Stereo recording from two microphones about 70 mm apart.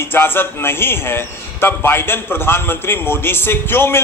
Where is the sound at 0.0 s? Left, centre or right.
Left.